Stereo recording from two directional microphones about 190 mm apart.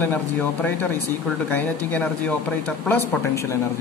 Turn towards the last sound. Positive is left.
turn(degrees=15)  # may be behind; listen again after turning